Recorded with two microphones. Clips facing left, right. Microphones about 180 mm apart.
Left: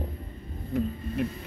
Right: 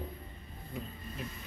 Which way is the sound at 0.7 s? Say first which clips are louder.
Left 14 dB; 65° left (ahead or behind).